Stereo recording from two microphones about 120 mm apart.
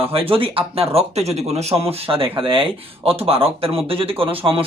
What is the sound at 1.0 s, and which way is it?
Speech, 60° right (ahead or behind).